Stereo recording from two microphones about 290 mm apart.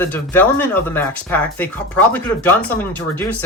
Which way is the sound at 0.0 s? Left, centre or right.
Centre.